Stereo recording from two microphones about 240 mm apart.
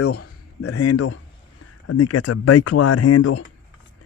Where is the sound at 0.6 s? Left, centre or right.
Left.